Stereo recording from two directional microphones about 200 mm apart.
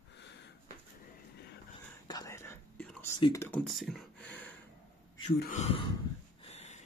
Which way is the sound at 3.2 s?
15° left (ahead or behind).